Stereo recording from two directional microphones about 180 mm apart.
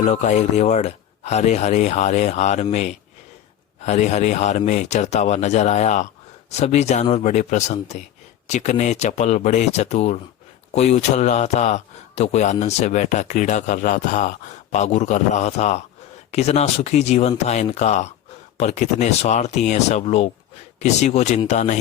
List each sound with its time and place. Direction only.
0.0 s a man's voice: 40° left (ahead or behind)
3.8 s a man's voice: 40° left (ahead or behind)